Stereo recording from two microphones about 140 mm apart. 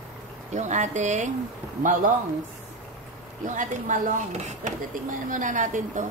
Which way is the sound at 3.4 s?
65° right (ahead or behind).